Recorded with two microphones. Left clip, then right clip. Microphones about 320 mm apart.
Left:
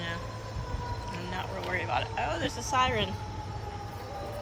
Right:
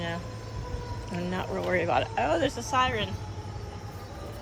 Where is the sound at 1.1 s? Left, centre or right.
Centre.